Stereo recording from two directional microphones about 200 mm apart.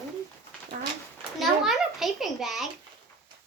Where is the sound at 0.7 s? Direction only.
45° right (ahead or behind).